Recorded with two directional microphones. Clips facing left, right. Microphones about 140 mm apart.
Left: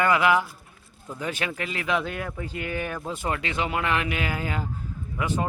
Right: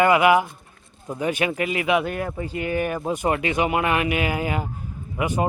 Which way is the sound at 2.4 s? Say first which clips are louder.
Right 7 dB; 5° right (ahead or behind).